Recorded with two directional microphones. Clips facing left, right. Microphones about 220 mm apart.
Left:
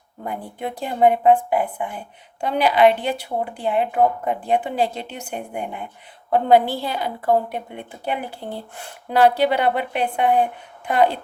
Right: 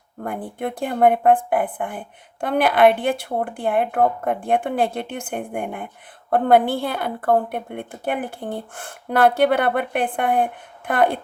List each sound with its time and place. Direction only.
0.2 s a woman's voice: 55° right (ahead or behind)